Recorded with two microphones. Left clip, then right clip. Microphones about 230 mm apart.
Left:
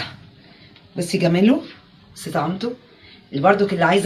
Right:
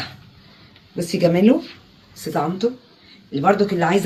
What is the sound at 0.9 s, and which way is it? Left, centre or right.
Speech, left.